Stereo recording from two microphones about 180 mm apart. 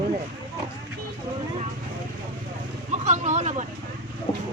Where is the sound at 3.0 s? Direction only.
40° right (ahead or behind).